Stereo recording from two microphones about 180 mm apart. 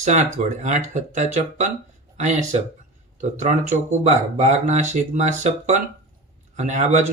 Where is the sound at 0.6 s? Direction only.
40° right (ahead or behind).